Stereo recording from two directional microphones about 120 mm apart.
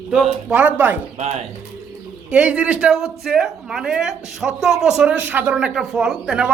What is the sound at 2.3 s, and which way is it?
Speech, 10° right (ahead or behind).